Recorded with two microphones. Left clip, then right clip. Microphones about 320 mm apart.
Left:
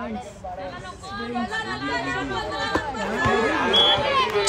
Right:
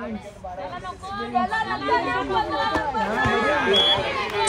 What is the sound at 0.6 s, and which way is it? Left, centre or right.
Speech, centre.